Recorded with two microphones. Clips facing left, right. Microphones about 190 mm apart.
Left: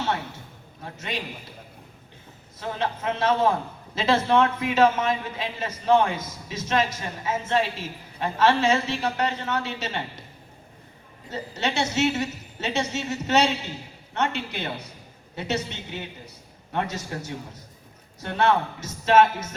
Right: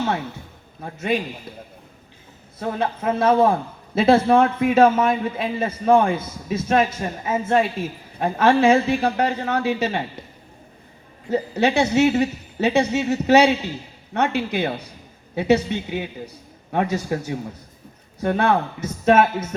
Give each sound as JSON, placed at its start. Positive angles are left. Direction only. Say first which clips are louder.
{"t": 0.8, "sound": "a woman's voice", "louder": "right 10 dB", "side_deg": -55}
{"t": 2.7, "sound": "a man's voice", "louder": "right 5 dB", "side_deg": -55}
{"t": 11.3, "sound": "a woman's voice", "louder": "right 9 dB", "side_deg": -55}